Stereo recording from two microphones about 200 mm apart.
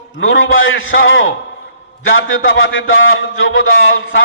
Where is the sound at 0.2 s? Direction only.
75° left (ahead or behind).